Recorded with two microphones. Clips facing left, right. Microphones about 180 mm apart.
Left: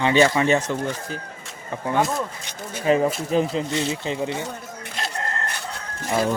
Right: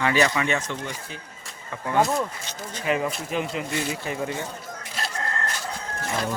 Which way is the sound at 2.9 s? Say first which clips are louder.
Left 6 dB; 30° left (ahead or behind).